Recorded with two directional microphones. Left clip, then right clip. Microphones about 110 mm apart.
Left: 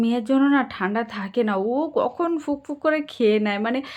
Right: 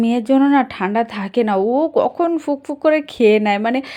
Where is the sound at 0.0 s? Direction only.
55° right (ahead or behind).